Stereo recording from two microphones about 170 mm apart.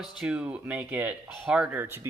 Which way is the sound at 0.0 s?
5° right (ahead or behind).